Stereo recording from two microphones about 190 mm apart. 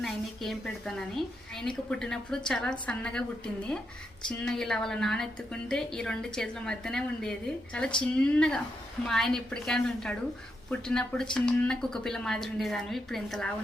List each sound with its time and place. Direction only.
0.0 s a woman's voice: centre (ahead or behind)